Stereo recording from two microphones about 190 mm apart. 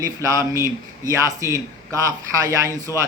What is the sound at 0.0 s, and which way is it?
A man's voice, 15° right (ahead or behind).